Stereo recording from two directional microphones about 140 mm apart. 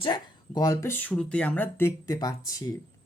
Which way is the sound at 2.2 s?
25° left (ahead or behind).